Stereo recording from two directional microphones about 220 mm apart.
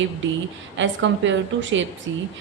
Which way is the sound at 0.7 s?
55° right (ahead or behind).